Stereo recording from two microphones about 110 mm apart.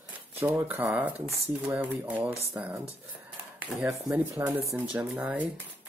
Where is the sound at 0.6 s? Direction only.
20° right (ahead or behind).